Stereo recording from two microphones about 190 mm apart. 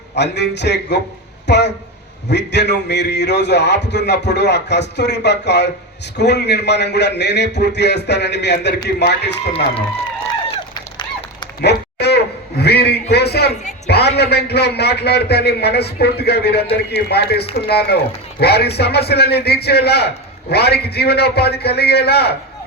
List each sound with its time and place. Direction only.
0.2 s a man's voice: 65° left (ahead or behind)
11.6 s a sound: 60° left (ahead or behind)
13.8 s a man's voice: 60° left (ahead or behind)